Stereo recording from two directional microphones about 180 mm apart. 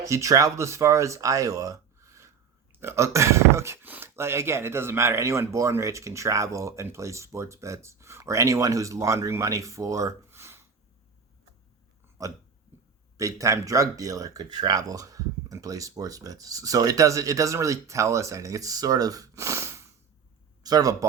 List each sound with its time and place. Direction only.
0.0 s speech: 15° right (ahead or behind)
12.2 s hiccup: 20° right (ahead or behind)
13.1 s speech: 20° right (ahead or behind)